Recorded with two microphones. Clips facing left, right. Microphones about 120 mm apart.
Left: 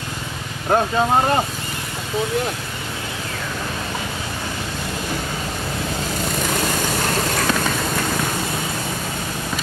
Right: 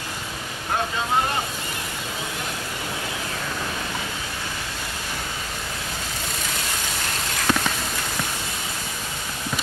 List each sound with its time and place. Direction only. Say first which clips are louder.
0.7 s speech: left 8 dB; 50° left (ahead or behind)